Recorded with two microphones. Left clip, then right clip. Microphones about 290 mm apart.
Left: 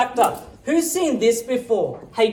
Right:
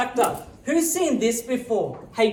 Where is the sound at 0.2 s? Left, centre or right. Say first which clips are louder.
Left 3 dB; centre.